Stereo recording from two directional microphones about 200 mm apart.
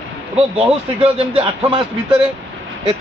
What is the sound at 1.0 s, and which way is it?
Speech, 30° right (ahead or behind).